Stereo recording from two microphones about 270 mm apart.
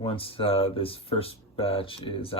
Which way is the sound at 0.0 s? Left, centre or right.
Left.